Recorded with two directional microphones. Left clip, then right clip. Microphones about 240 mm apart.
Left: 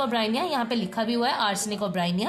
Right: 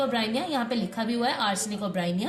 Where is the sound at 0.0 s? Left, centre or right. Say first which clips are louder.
Left 2 dB; left.